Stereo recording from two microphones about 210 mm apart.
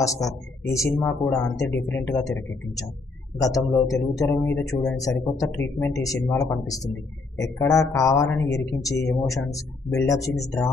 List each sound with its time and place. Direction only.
0.0 s speech: 15° left (ahead or behind)